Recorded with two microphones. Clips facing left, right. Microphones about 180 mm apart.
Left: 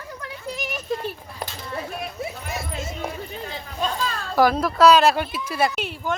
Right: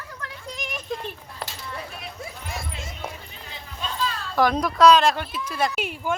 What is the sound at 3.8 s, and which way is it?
Children playing, 45° left (ahead or behind).